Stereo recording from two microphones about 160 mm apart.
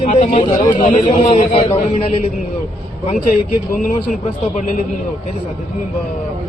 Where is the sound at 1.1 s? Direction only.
40° left (ahead or behind).